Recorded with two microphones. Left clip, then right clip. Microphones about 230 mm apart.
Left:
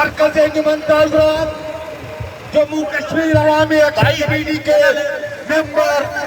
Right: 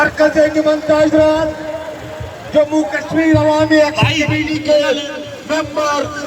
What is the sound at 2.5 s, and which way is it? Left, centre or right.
A man's voice, left.